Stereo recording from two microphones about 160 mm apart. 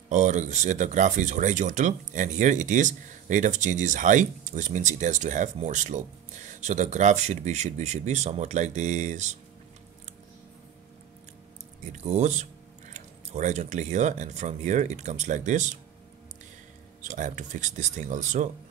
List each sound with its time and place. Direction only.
0.1 s speech: 50° right (ahead or behind)
12.0 s speech: 45° right (ahead or behind)
17.0 s speech: 50° right (ahead or behind)